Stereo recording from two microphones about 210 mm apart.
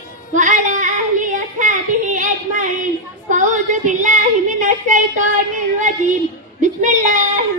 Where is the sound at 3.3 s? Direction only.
35° right (ahead or behind).